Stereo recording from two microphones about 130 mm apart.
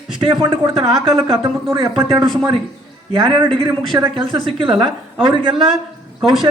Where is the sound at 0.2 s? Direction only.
40° right (ahead or behind).